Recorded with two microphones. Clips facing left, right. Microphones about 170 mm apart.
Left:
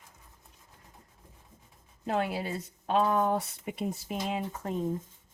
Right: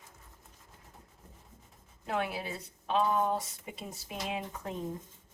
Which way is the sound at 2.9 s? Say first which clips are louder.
Left 3 dB; 50° left (ahead or behind).